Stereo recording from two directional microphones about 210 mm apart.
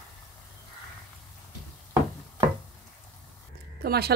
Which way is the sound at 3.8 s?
50° right (ahead or behind).